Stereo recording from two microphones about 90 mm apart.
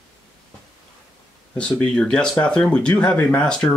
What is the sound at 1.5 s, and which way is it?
Speech, 10° left (ahead or behind).